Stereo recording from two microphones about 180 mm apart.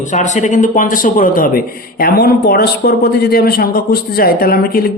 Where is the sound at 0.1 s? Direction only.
45° left (ahead or behind).